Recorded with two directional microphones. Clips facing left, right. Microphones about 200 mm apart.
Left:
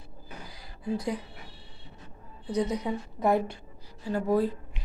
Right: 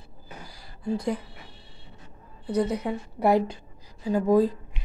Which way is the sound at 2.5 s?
5° right (ahead or behind).